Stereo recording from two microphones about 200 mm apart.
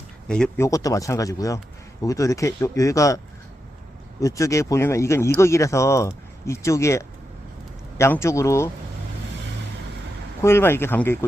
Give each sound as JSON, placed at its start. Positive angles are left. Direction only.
{"t": 0.3, "sound": "speech", "side_deg": 5}
{"t": 4.2, "sound": "speech", "side_deg": 15}
{"t": 10.4, "sound": "speech", "side_deg": 10}